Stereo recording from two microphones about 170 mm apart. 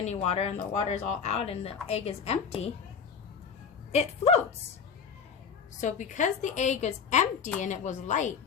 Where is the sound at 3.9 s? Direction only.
40° left (ahead or behind).